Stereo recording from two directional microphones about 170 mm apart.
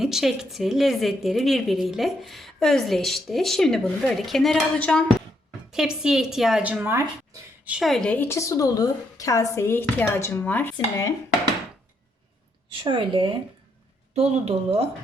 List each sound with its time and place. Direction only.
0.0 s a woman's voice: centre (ahead or behind); by 11.1 s 15° left (ahead or behind)
12.8 s speech: 30° right (ahead or behind)
14.4 s speech: 35° right (ahead or behind)